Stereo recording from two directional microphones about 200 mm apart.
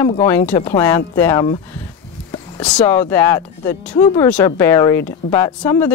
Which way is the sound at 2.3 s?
20° left (ahead or behind).